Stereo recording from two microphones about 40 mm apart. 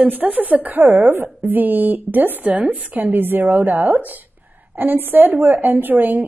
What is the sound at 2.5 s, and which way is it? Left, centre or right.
Speech, right.